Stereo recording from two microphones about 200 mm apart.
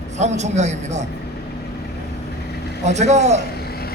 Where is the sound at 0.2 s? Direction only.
35° right (ahead or behind).